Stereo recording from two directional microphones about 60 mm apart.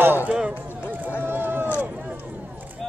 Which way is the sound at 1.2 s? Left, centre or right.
Right.